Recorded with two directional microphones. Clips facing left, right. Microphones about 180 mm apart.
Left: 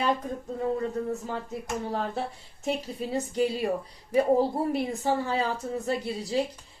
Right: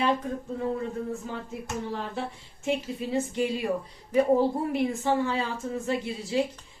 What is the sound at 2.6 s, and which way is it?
A woman's voice, 40° left (ahead or behind).